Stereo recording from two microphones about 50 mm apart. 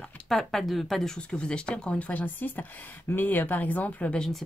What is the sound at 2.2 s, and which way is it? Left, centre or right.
Speech, left.